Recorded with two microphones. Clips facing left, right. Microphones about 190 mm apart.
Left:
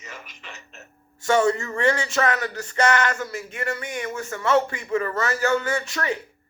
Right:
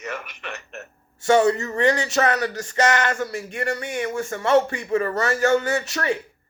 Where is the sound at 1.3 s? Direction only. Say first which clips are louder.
Right 3 dB; 20° right (ahead or behind).